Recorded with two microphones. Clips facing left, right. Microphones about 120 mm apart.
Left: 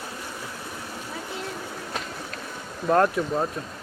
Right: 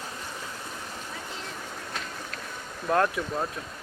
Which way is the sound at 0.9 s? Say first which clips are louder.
Left 4 dB; 10° left (ahead or behind).